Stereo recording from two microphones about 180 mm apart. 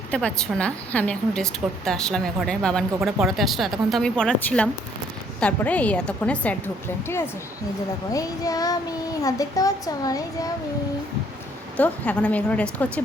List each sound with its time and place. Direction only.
0.1 s a woman's voice: 5° left (ahead or behind)
11.8 s a woman's voice: 10° left (ahead or behind)